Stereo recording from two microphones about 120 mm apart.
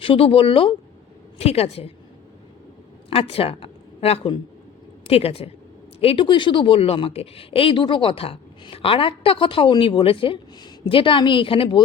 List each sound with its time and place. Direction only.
0.0 s a woman's voice: 50° left (ahead or behind)
3.2 s a woman's voice: 55° left (ahead or behind)